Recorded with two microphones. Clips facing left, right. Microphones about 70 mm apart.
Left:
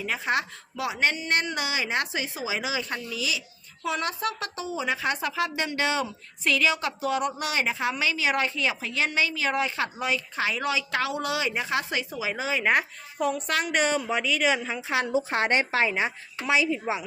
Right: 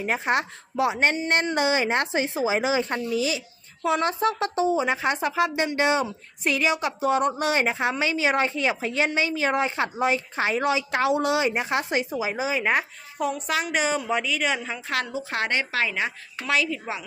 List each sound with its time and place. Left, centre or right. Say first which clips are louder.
0.0 s a woman's voice: right 3 dB; right
12.4 s speech: right 1 dB; centre
12.6 s a woman's voice: even; centre
14.8 s a woman's voice: left 1 dB; centre
15.1 s a woman's voice: left 3 dB; left